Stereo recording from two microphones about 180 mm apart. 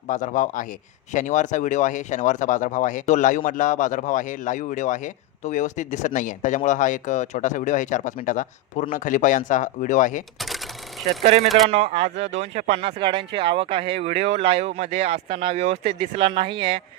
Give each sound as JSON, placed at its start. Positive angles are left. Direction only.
{"t": 0.1, "sound": "speech", "side_deg": 45}
{"t": 10.3, "sound": "cash register", "side_deg": 0}
{"t": 11.2, "sound": "speech", "side_deg": -35}
{"t": 11.4, "sound": "speech", "side_deg": 0}
{"t": 11.7, "sound": "speech", "side_deg": -35}